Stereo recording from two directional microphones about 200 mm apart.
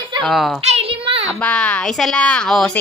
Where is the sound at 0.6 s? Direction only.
30° right (ahead or behind).